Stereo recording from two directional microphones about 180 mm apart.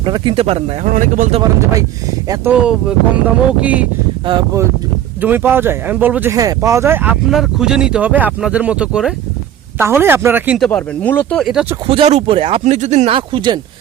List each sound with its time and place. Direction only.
0.0 s speech: 25° right (ahead or behind); by 1.4 s 45° right (ahead or behind)
2.3 s speech: 10° right (ahead or behind)
5.2 s speech: 10° right (ahead or behind)
10.6 s speech: 5° left (ahead or behind)
11.9 s speech: 35° right (ahead or behind)